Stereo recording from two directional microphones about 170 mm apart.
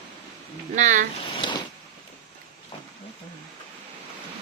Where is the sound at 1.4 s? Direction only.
30° left (ahead or behind).